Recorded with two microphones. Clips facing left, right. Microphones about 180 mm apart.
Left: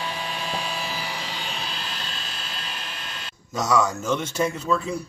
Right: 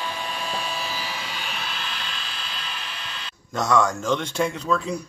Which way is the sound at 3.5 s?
5° left (ahead or behind).